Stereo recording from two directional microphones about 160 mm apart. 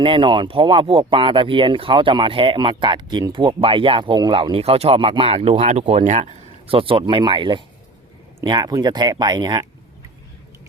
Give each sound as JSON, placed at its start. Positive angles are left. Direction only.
{"t": 0.0, "sound": "speech", "side_deg": -30}
{"t": 6.7, "sound": "speech", "side_deg": -35}